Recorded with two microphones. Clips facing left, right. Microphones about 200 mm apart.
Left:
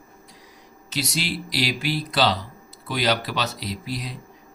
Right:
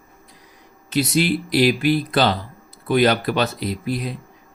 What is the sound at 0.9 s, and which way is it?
Speech, 55° right (ahead or behind).